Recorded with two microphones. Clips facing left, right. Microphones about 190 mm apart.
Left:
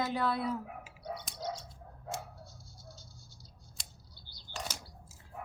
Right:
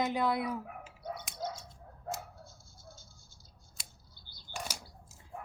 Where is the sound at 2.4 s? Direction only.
50° right (ahead or behind).